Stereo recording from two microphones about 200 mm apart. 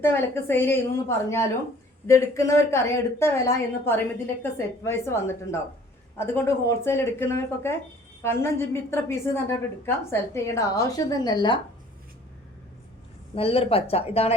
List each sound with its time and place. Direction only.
0.0 s a woman's voice: 10° left (ahead or behind)
13.3 s speech: 30° left (ahead or behind)